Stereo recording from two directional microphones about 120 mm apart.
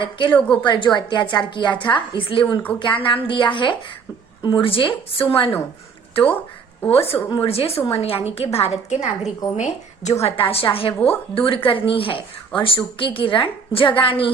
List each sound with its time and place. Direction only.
0.0 s a woman's voice: 40° left (ahead or behind)
0.3 s a woman's voice: 10° left (ahead or behind)
0.6 s a woman's voice: 40° left (ahead or behind)
6.9 s a woman's voice: 55° left (ahead or behind)
8.5 s a woman's voice: 65° left (ahead or behind); by 14.3 s 45° left (ahead or behind)